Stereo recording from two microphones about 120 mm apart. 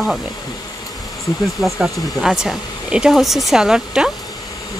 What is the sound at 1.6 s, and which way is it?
Speech, centre (ahead or behind).